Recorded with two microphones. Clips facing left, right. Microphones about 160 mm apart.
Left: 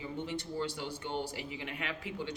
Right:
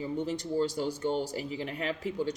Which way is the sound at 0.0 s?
40° right (ahead or behind).